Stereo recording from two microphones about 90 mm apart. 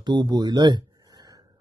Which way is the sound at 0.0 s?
55° right (ahead or behind).